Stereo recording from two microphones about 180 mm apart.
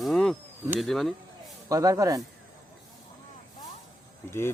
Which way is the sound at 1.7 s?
20° right (ahead or behind).